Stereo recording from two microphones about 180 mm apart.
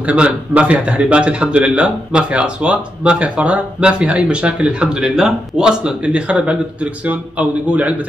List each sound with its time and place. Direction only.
0.0 s a man's voice: 5° right (ahead or behind)